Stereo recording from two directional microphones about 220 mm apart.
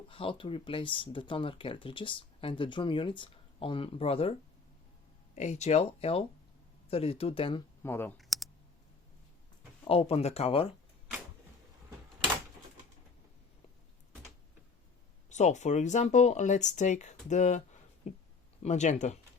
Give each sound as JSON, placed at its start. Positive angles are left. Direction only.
{"t": 0.1, "sound": "speech", "side_deg": 25}
{"t": 7.8, "sound": "speech", "side_deg": 10}
{"t": 8.2, "sound": "typing", "side_deg": 0}
{"t": 9.8, "sound": "speech", "side_deg": 25}
{"t": 15.3, "sound": "speech", "side_deg": 30}